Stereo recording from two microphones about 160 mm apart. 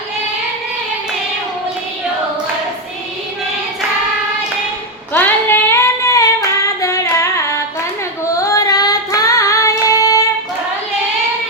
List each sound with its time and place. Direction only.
5.1 s child singing: 10° left (ahead or behind)
6.8 s female singing: 15° left (ahead or behind)
8.4 s child singing: 20° left (ahead or behind)